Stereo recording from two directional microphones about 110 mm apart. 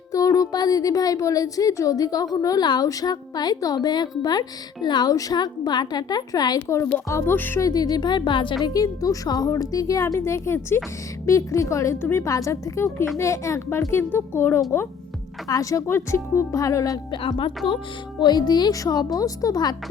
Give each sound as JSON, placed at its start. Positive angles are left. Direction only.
{"t": 0.1, "sound": "a woman's voice", "side_deg": 30}
{"t": 7.6, "sound": "a woman's voice", "side_deg": 35}
{"t": 8.6, "sound": "a woman's voice", "side_deg": 35}
{"t": 17.1, "sound": "a woman's voice", "side_deg": 55}
{"t": 18.2, "sound": "a woman's voice", "side_deg": 40}